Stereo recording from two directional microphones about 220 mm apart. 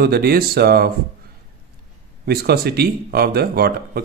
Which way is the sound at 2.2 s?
45° right (ahead or behind).